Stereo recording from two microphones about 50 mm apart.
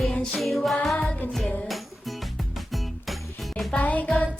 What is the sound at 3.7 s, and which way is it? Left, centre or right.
Music, left.